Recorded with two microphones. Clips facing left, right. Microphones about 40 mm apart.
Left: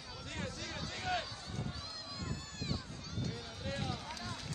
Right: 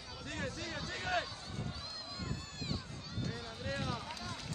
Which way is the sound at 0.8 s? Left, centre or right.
Right.